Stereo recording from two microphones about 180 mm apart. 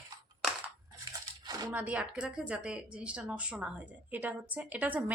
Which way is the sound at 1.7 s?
10° right (ahead or behind).